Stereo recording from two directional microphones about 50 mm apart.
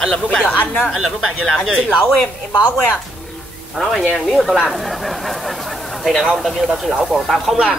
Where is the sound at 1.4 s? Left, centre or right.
Centre.